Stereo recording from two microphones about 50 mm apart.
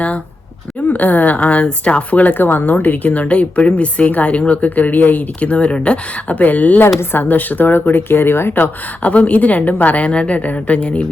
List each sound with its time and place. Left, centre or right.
0.9 s speech: left
2.4 s a woman's voice: left
9.0 s speech: left